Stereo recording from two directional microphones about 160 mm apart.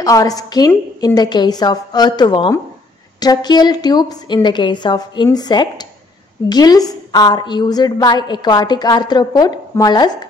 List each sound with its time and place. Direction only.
0.0 s a woman's voice: 20° left (ahead or behind)